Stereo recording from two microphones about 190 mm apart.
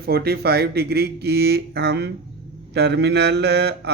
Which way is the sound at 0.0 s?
55° right (ahead or behind).